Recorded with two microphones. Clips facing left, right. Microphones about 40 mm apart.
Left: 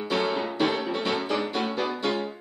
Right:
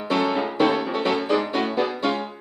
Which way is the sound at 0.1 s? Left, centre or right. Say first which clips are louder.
Right 5 dB; centre.